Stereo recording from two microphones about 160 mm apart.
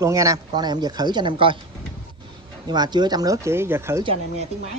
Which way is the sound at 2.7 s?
25° right (ahead or behind).